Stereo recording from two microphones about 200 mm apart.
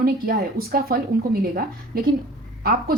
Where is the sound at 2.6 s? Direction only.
45° right (ahead or behind).